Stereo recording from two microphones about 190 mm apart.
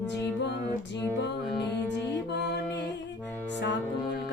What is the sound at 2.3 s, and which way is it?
Mantra, 65° left (ahead or behind).